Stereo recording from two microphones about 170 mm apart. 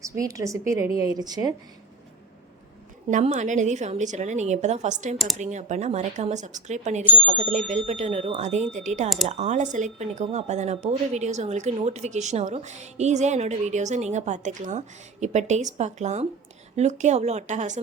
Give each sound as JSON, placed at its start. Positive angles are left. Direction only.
{"t": 0.0, "sound": "a woman's voice", "side_deg": -20}
{"t": 3.1, "sound": "a woman's voice", "side_deg": -45}
{"t": 5.1, "sound": "speech", "side_deg": 0}
{"t": 5.4, "sound": "a woman's voice", "side_deg": -45}